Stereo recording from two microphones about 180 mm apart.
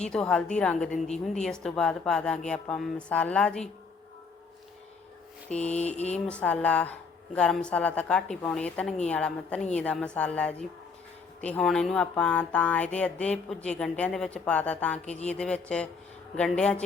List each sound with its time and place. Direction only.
0.0 s a woman's voice: 5° left (ahead or behind)
5.7 s mantra: 40° left (ahead or behind)
6.2 s a woman's voice: 5° left (ahead or behind)